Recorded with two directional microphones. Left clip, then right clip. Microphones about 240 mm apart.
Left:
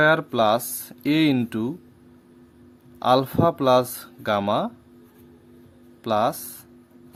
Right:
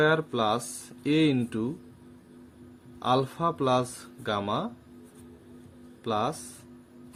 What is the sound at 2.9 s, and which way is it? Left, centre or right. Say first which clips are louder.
Speech: left 7 dB; left.